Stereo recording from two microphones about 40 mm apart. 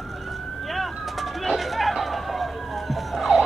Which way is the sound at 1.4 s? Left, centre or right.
Centre.